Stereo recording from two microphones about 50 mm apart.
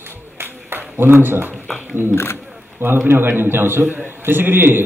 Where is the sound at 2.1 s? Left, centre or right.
Left.